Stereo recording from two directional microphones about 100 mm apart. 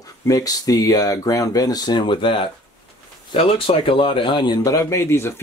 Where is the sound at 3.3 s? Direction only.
65° left (ahead or behind).